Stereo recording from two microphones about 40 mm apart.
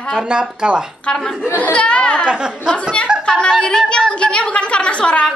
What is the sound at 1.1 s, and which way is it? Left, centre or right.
A woman's voice, left.